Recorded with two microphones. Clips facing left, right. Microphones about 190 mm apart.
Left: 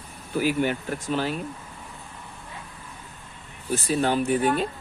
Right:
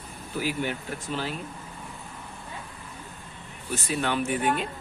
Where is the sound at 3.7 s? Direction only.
35° left (ahead or behind).